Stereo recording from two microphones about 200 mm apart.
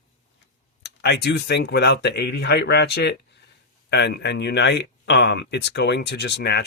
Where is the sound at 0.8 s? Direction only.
55° left (ahead or behind).